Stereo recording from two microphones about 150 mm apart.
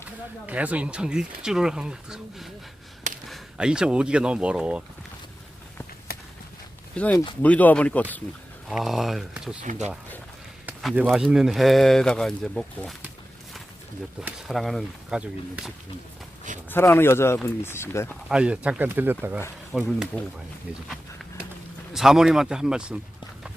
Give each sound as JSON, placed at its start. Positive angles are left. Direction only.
{"t": 0.4, "sound": "speech", "side_deg": -10}
{"t": 6.9, "sound": "speech", "side_deg": 10}
{"t": 8.7, "sound": "speech", "side_deg": 0}
{"t": 9.6, "sound": "speech", "side_deg": -50}
{"t": 11.0, "sound": "speech", "side_deg": 0}
{"t": 14.2, "sound": "speech", "side_deg": -5}
{"t": 16.6, "sound": "speech", "side_deg": 15}
{"t": 18.3, "sound": "speech", "side_deg": -5}
{"t": 19.7, "sound": "speech", "side_deg": 0}
{"t": 21.9, "sound": "speech", "side_deg": -5}